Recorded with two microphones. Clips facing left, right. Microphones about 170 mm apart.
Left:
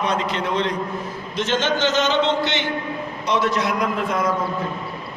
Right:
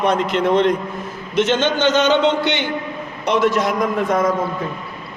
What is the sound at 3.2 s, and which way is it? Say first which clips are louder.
A man's voice: right 4 dB; 50° right (ahead or behind).